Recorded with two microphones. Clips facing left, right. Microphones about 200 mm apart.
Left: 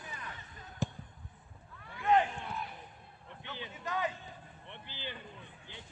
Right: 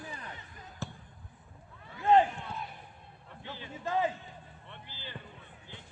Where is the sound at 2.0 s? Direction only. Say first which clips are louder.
Right 4 dB; 30° right (ahead or behind).